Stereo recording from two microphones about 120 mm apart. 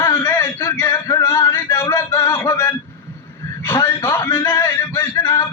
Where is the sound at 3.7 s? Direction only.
25° left (ahead or behind).